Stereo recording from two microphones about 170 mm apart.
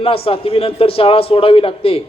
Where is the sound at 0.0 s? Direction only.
35° left (ahead or behind).